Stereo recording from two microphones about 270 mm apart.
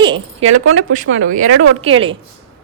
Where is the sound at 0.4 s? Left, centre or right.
Right.